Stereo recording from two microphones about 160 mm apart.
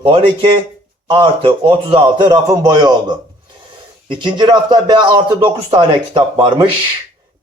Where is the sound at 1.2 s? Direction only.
35° right (ahead or behind).